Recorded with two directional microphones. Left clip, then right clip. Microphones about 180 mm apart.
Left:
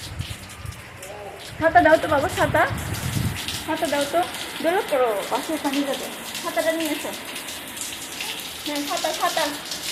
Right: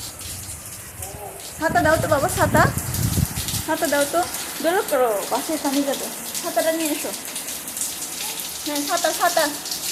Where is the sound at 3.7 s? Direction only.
20° right (ahead or behind).